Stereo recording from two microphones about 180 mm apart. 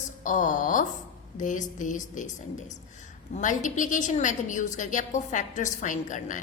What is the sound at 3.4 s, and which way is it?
A woman's voice, 45° left (ahead or behind).